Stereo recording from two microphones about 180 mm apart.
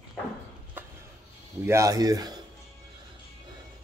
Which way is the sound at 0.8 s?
10° right (ahead or behind).